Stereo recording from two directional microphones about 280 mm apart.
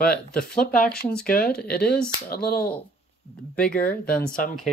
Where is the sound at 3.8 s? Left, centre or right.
Left.